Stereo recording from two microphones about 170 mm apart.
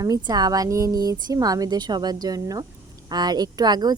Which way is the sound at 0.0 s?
20° right (ahead or behind).